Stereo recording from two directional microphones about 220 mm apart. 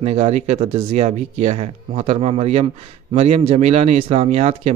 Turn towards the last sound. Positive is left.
turn(degrees=-30)  # may be behind; listen again after turning